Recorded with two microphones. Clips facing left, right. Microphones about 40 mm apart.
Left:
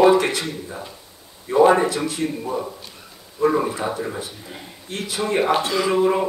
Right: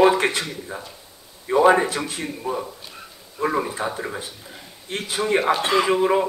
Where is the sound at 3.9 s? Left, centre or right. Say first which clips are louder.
Left 2 dB; centre.